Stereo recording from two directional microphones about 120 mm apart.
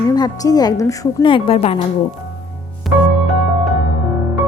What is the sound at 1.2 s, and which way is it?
Speech, 50° left (ahead or behind).